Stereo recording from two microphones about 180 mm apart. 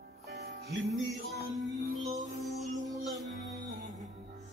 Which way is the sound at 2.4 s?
Centre (ahead or behind).